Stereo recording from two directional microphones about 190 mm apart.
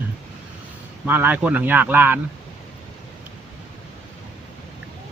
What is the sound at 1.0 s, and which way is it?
Speech, 10° right (ahead or behind).